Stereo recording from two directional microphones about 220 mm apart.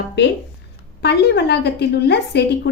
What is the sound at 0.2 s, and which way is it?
A woman's voice, 50° left (ahead or behind).